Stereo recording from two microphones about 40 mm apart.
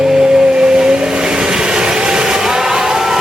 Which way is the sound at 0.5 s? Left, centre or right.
Centre.